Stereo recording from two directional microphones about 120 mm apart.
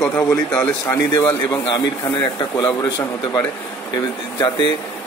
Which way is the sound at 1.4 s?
35° left (ahead or behind).